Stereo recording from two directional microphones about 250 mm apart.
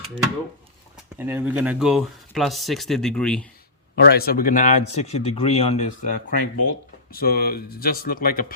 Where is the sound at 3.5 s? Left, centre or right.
Left.